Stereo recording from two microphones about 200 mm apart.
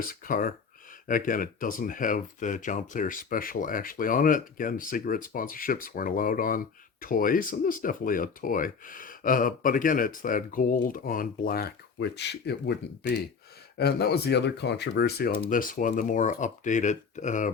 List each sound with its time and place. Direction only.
0.1 s speech: 45° left (ahead or behind)
11.9 s speech: 60° left (ahead or behind)
15.4 s speech: 40° left (ahead or behind)